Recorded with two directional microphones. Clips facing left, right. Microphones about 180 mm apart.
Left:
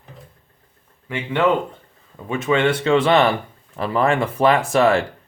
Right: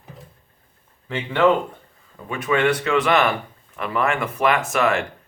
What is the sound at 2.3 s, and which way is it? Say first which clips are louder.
Speech: left 2 dB; 25° left (ahead or behind).